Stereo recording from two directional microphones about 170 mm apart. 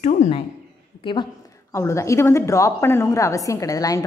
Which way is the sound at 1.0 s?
30° left (ahead or behind).